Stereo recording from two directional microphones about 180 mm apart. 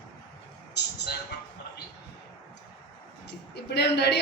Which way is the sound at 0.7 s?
65° left (ahead or behind).